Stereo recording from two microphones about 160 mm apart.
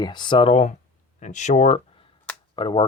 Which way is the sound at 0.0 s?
30° left (ahead or behind).